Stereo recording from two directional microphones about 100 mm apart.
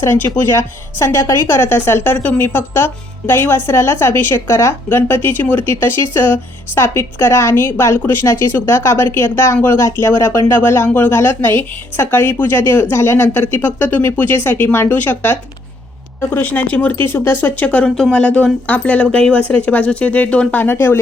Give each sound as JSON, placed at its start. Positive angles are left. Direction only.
{"t": 0.0, "sound": "speech", "side_deg": 20}